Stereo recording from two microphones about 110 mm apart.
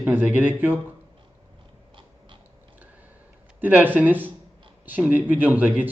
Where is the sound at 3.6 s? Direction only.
15° right (ahead or behind).